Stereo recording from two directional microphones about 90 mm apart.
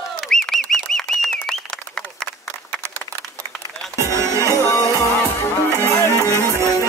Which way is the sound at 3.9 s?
30° right (ahead or behind).